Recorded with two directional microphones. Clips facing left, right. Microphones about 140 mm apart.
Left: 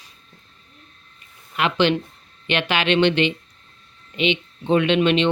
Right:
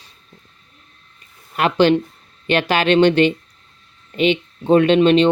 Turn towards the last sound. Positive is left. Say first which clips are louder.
# right 5 dB
turn(degrees=-35)  # may be behind; listen again after turning